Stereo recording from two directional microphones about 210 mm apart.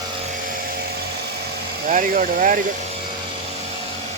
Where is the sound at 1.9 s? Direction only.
40° right (ahead or behind).